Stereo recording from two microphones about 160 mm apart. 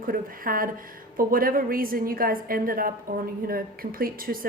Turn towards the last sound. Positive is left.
turn(degrees=-65)  # may be behind; listen again after turning